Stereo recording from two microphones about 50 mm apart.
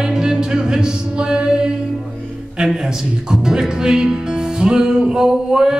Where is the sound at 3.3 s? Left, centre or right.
Centre.